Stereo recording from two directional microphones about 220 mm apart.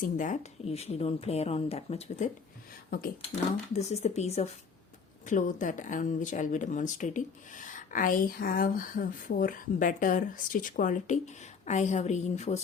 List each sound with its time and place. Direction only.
0.0 s speech: 35° left (ahead or behind)
3.7 s speech: 30° left (ahead or behind)